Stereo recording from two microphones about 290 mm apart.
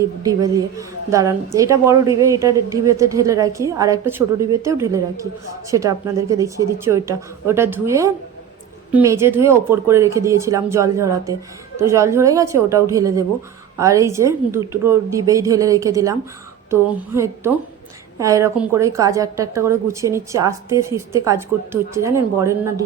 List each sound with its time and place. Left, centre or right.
0.2 s a woman's voice: centre